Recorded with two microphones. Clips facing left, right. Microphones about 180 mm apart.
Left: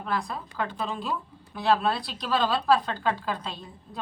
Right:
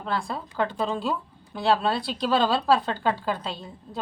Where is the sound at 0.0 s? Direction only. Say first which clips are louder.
Right 1 dB; 30° right (ahead or behind).